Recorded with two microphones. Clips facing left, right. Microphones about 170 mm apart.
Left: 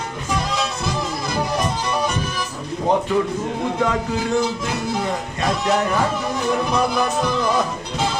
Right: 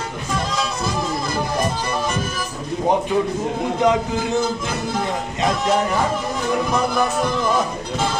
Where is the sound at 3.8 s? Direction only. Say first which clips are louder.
Right 4 dB; 20° right (ahead or behind).